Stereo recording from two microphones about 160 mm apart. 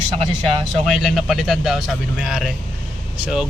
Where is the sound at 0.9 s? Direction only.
Centre (ahead or behind).